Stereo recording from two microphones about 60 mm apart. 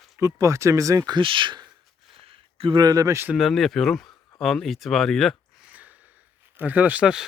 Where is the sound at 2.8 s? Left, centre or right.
Right.